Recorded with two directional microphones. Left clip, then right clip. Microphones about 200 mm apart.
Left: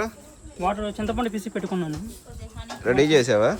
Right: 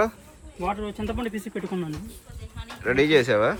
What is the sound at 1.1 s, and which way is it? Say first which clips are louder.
Speech: left 4 dB; 40° left (ahead or behind).